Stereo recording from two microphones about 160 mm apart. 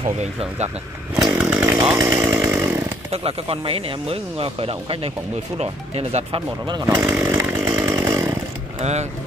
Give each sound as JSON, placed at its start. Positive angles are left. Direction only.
{"t": 0.0, "sound": "speech", "side_deg": -40}
{"t": 1.1, "sound": "chainsaw", "side_deg": -5}
{"t": 2.0, "sound": "chainsaw", "side_deg": -20}
{"t": 3.1, "sound": "speech", "side_deg": -35}
{"t": 6.9, "sound": "chainsaw", "side_deg": -15}
{"t": 8.7, "sound": "vehicle", "side_deg": -45}